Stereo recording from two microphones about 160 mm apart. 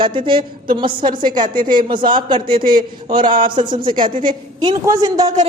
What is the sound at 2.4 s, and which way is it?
Speech, 60° right (ahead or behind).